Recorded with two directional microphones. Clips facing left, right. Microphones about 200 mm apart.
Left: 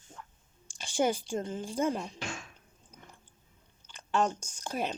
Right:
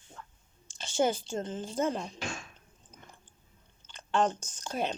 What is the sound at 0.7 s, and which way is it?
Speech, 15° left (ahead or behind).